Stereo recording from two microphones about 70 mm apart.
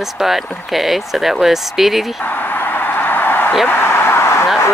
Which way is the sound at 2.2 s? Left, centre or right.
Left.